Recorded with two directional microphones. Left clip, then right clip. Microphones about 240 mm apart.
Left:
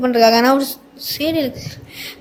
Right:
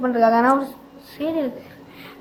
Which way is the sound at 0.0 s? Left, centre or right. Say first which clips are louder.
Left 4 dB; left.